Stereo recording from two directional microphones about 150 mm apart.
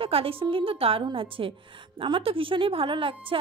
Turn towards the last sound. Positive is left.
turn(degrees=-35)  # may be behind; listen again after turning